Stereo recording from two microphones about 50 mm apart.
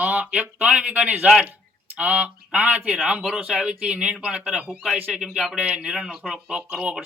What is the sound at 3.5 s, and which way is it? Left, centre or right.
Speech, centre.